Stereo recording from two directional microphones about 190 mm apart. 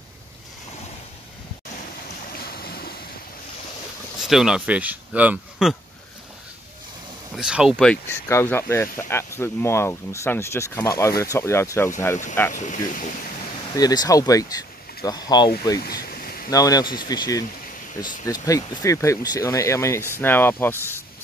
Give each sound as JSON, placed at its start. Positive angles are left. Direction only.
{"t": 2.3, "sound": "boat", "side_deg": 55}
{"t": 4.2, "sound": "speech", "side_deg": 0}
{"t": 7.3, "sound": "speech", "side_deg": -5}
{"t": 12.5, "sound": "speech", "side_deg": 40}
{"t": 13.7, "sound": "speech", "side_deg": 20}
{"t": 15.8, "sound": "boat", "side_deg": 55}
{"t": 16.4, "sound": "speech", "side_deg": 20}